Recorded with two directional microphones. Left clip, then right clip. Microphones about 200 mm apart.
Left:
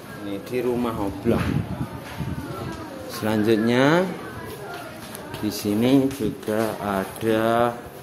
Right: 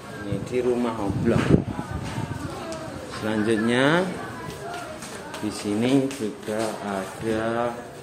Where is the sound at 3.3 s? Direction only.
25° left (ahead or behind).